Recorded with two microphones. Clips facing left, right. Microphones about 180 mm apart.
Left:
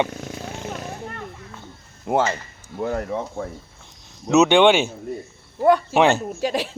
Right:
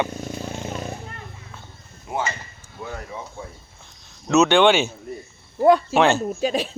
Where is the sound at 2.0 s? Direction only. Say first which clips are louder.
Left 7 dB; 75° left (ahead or behind).